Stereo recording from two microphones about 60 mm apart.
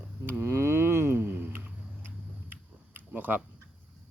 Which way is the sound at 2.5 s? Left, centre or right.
Right.